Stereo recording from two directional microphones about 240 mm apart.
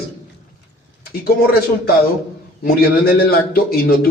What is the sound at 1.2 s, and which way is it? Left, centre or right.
A man's voice, left.